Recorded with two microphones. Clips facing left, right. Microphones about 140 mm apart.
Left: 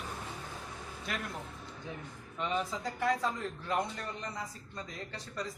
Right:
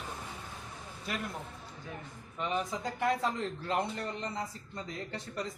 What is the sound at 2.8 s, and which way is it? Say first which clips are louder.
A man's voice: right 2 dB; 25° right (ahead or behind).